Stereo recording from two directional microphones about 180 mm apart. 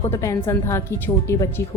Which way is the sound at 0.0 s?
15° left (ahead or behind).